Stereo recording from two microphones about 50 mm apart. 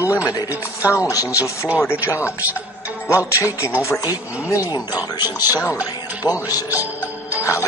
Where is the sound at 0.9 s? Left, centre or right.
Left.